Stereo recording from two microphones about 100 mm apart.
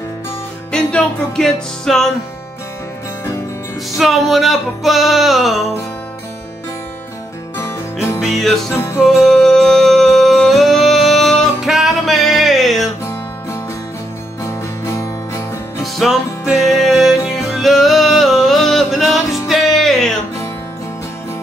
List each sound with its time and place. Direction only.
0.7 s music: 10° left (ahead or behind)
3.9 s music: centre (ahead or behind)
8.2 s music: centre (ahead or behind)
14.9 s music: 30° left (ahead or behind)
15.8 s music: centre (ahead or behind)